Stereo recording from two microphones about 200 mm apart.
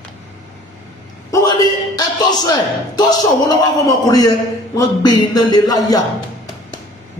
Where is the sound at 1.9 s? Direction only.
20° left (ahead or behind).